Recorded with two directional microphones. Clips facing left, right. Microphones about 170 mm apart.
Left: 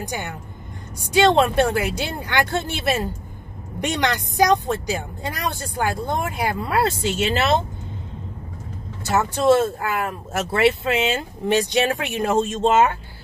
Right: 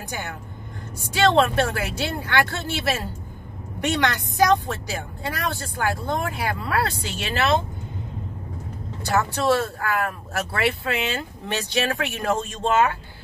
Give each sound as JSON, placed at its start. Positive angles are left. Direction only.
{"t": 0.0, "sound": "speech", "side_deg": 15}
{"t": 9.1, "sound": "speech", "side_deg": 20}